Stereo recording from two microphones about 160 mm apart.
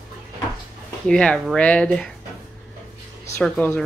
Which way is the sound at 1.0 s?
5° left (ahead or behind).